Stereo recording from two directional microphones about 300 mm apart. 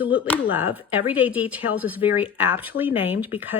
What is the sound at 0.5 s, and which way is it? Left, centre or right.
Speech, centre.